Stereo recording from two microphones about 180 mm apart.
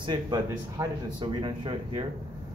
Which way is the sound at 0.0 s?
25° right (ahead or behind).